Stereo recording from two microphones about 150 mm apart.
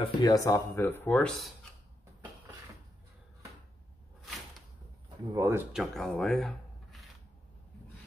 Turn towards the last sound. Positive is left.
turn(degrees=0)  # may be behind; listen again after turning